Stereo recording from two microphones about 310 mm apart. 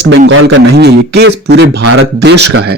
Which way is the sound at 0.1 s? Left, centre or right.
Right.